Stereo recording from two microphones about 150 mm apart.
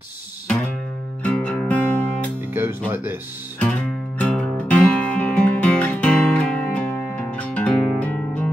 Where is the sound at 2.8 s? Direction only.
15° right (ahead or behind).